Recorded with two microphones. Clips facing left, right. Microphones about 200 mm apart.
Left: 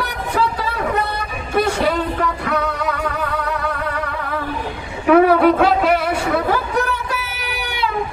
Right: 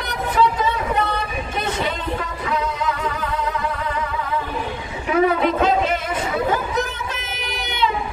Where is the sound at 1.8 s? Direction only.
65° left (ahead or behind).